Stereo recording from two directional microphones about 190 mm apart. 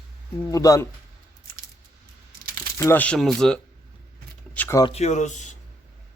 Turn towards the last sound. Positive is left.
turn(degrees=40)  # may be behind; listen again after turning